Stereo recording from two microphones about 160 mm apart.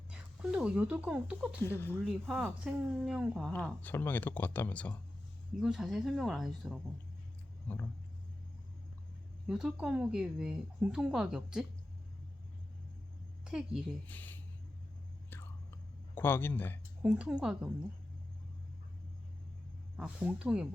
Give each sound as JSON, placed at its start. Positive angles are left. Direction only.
{"t": 0.1, "sound": "speech", "side_deg": -5}
{"t": 1.6, "sound": "speech", "side_deg": 15}
{"t": 2.0, "sound": "speech", "side_deg": 0}
{"t": 3.5, "sound": "speech", "side_deg": 10}
{"t": 5.5, "sound": "speech", "side_deg": 0}
{"t": 9.5, "sound": "speech", "side_deg": -5}
{"t": 13.4, "sound": "a woman's voice", "side_deg": -5}
{"t": 14.1, "sound": "speech", "side_deg": 10}
{"t": 15.3, "sound": "whispering", "side_deg": 15}
{"t": 17.0, "sound": "speech", "side_deg": -5}
{"t": 20.0, "sound": "speech", "side_deg": -5}